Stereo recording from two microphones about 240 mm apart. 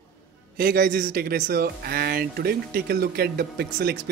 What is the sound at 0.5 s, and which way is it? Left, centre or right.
Speech, right.